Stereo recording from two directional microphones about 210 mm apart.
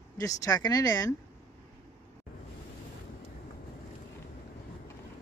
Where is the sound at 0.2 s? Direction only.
15° left (ahead or behind).